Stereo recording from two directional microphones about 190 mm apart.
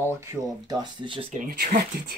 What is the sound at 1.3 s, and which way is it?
Speech, 40° right (ahead or behind).